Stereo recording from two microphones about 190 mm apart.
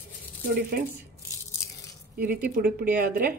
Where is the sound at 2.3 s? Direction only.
50° right (ahead or behind).